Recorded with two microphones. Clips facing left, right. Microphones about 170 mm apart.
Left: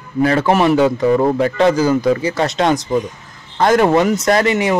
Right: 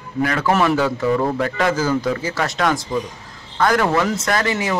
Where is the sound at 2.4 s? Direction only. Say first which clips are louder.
Left 4 dB; 25° left (ahead or behind).